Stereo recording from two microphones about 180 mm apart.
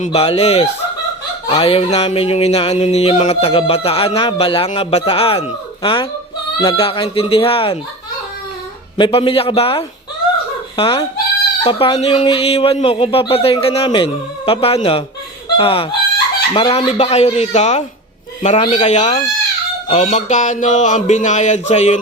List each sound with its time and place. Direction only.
0.0 s music: 35° left (ahead or behind)
9.0 s music: 30° left (ahead or behind)
10.8 s speech: 30° left (ahead or behind)
11.6 s music: 25° left (ahead or behind)
15.5 s speech: 30° left (ahead or behind)
16.6 s music: 30° left (ahead or behind)